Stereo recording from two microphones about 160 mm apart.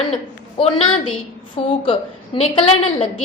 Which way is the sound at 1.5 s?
30° left (ahead or behind).